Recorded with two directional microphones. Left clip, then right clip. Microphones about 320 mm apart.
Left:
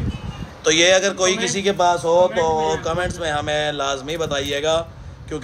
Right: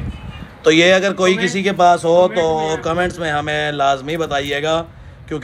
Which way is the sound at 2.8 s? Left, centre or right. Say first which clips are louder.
Right 4 dB; right.